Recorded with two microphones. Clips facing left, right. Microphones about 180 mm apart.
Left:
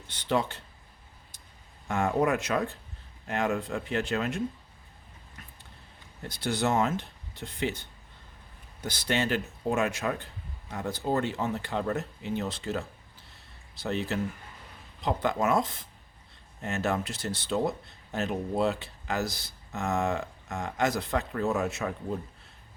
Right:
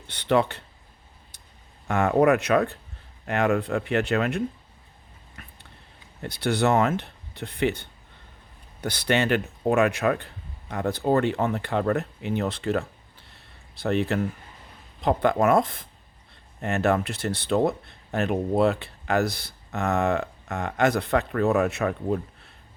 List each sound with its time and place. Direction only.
0.1 s speech: 65° right (ahead or behind)
1.9 s speech: 65° right (ahead or behind)
5.4 s a sound: 65° right (ahead or behind)
6.2 s speech: 65° right (ahead or behind)